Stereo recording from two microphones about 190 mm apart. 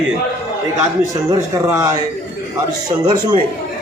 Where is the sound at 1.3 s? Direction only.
15° right (ahead or behind).